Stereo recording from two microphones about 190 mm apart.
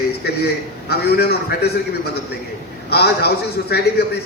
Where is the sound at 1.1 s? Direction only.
55° left (ahead or behind).